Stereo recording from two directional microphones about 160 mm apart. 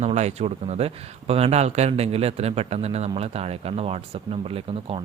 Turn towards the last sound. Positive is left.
turn(degrees=-40)  # may be behind; listen again after turning